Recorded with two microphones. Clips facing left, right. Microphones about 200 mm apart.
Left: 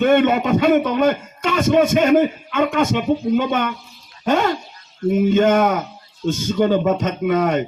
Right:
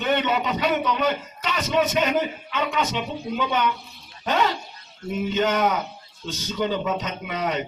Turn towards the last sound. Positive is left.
turn(degrees=50)  # may be behind; listen again after turning